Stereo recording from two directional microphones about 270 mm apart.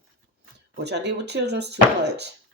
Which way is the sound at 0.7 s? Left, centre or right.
Right.